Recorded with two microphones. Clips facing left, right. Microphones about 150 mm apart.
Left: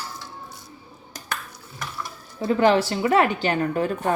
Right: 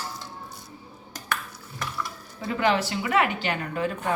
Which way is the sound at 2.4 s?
35° left (ahead or behind).